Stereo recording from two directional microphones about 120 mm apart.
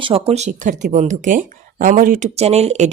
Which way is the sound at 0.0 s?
55° right (ahead or behind).